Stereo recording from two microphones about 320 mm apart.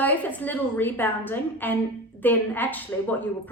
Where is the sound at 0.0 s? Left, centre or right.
Centre.